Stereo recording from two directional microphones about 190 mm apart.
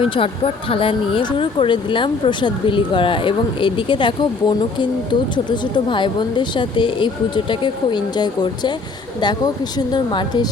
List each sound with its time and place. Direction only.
0.0 s speech: 25° left (ahead or behind)